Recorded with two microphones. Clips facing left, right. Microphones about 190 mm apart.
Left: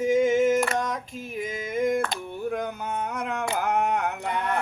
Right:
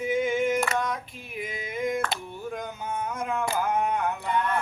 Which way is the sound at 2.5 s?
60° left (ahead or behind).